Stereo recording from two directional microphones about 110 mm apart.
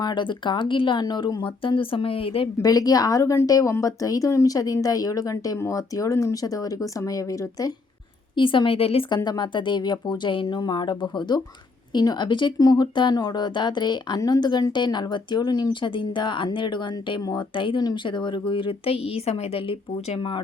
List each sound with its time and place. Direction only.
0.0 s speech: 45° left (ahead or behind)
2.6 s a woman's voice: 35° left (ahead or behind)
8.4 s a woman's voice: 50° left (ahead or behind)
9.0 s speech: 40° left (ahead or behind)